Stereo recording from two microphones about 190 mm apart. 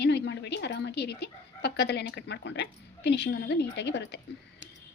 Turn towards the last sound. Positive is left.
turn(degrees=65)  # may be behind; listen again after turning